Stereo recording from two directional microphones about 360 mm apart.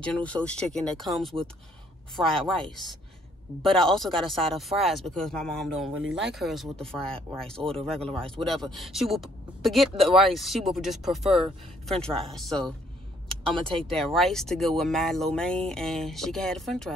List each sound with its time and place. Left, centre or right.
0.0 s speech: centre
5.9 s speech: right
6.3 s speech: centre